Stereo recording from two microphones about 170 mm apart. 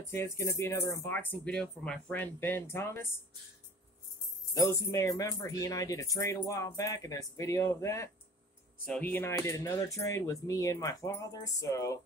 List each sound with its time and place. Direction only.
0.0 s speech: 15° left (ahead or behind)
4.6 s speech: 20° left (ahead or behind)